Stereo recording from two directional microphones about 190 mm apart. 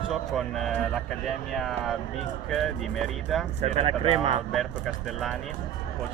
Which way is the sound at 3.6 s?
35° right (ahead or behind).